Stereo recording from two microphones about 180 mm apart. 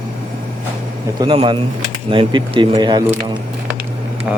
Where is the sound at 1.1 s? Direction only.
30° right (ahead or behind).